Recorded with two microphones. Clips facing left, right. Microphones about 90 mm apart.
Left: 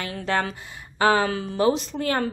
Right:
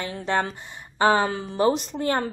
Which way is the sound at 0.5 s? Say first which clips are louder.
Left 1 dB; 25° right (ahead or behind).